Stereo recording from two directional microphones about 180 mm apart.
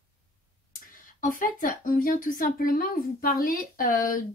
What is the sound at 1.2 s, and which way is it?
Speech, 50° left (ahead or behind).